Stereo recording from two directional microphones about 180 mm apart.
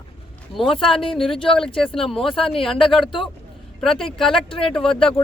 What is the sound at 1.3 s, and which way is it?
Speech, 30° left (ahead or behind).